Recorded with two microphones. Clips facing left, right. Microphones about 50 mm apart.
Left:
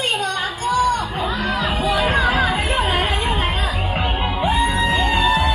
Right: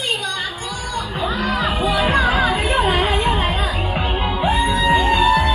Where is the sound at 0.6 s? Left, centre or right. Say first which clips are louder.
Left 9 dB; left.